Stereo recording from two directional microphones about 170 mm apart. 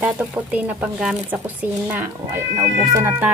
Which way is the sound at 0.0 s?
10° right (ahead or behind).